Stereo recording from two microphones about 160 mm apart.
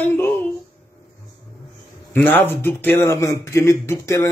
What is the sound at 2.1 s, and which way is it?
A man's voice, 10° left (ahead or behind).